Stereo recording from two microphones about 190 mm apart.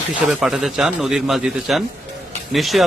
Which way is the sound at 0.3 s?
5° right (ahead or behind).